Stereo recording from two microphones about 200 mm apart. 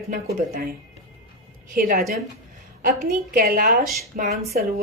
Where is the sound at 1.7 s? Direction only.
45° right (ahead or behind).